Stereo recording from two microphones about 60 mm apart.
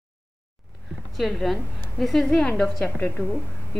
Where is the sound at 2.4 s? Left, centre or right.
Centre.